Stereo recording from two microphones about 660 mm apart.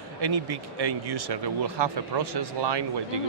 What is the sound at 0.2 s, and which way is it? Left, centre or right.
Speech, right.